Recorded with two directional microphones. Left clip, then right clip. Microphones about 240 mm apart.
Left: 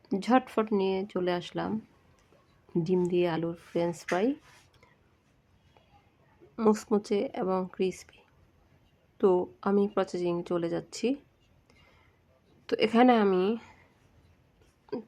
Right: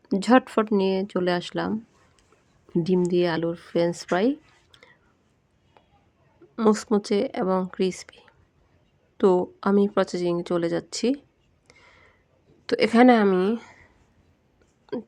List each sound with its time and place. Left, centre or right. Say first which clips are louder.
0.1 s speech: right 6 dB; centre
2.7 s speech: right 5 dB; centre
6.6 s speech: right 5 dB; centre
12.6 s a woman's voice: right 6 dB; centre